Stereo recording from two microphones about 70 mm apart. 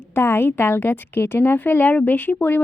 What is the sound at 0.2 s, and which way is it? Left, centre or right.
A woman's voice, left.